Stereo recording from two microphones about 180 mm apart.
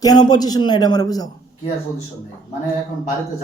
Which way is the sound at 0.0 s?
20° left (ahead or behind).